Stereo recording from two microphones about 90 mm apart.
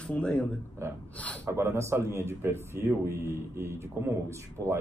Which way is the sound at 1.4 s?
30° right (ahead or behind).